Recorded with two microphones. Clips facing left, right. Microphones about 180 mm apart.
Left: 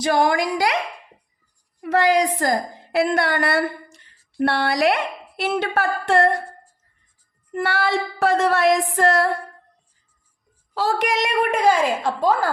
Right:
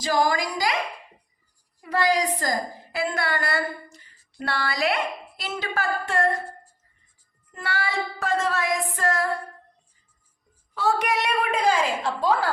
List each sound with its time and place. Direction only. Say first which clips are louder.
0.0 s a woman's voice: left 4 dB; 60° left (ahead or behind)
2.4 s a woman's voice: left 5 dB; 70° left (ahead or behind)
5.4 s female singing: left 8 dB; 65° left (ahead or behind)
7.5 s female singing: left 7 dB; 65° left (ahead or behind)
10.8 s a woman's voice: left 3 dB; 90° left
12.0 s a woman's voice: left 3 dB; 45° left (ahead or behind)